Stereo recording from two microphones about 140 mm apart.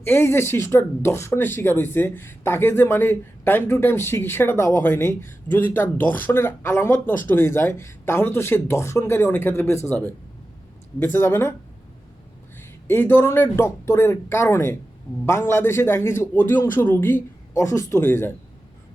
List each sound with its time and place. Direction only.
0.0 s speech: 15° left (ahead or behind)
12.9 s speech: 15° left (ahead or behind)